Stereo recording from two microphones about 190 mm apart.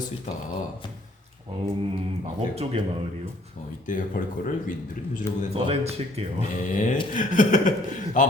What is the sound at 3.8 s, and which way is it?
Speech, 45° left (ahead or behind).